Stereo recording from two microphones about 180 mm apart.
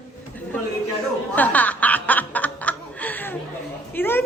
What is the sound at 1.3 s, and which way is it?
Snicker, 10° left (ahead or behind).